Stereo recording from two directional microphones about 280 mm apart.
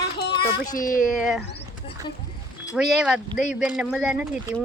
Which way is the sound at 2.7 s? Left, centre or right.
Centre.